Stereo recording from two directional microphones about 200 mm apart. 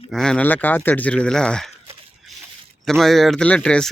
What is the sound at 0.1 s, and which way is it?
Speech, 5° left (ahead or behind).